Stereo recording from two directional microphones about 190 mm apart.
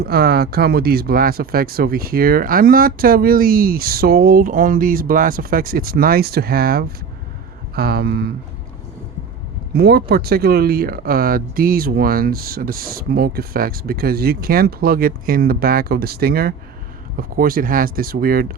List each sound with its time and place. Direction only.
0.0 s speech: 55° right (ahead or behind)
9.7 s speech: 55° right (ahead or behind)